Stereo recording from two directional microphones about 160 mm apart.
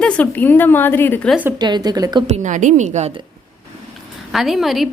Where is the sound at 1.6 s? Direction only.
25° right (ahead or behind).